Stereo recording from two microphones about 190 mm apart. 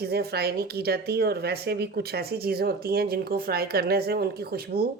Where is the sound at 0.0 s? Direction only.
55° right (ahead or behind).